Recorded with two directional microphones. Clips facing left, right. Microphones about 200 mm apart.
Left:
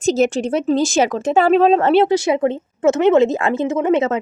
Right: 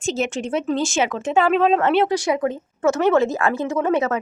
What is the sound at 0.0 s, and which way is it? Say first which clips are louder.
Speech: left 7 dB; 40° left (ahead or behind).